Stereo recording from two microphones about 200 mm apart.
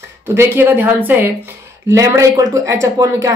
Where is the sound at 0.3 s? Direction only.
10° right (ahead or behind).